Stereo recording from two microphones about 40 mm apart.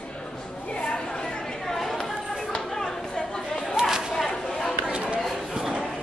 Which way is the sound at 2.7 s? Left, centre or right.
Centre.